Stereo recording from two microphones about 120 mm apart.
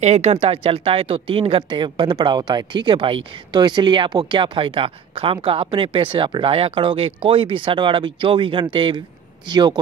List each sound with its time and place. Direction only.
0.0 s speech: 70° right (ahead or behind); by 9.8 s 35° right (ahead or behind)